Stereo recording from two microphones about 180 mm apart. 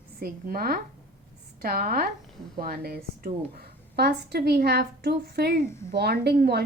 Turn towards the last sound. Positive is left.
turn(degrees=-65)  # may be behind; listen again after turning